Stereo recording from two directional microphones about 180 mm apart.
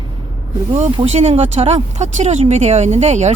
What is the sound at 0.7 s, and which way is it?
Speech, 35° right (ahead or behind).